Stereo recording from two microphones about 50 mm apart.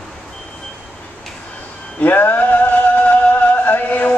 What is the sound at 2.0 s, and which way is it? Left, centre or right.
Music, left.